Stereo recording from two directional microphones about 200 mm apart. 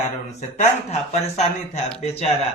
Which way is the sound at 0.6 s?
35° left (ahead or behind).